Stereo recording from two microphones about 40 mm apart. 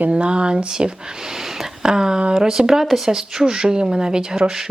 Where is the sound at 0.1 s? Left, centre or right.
Right.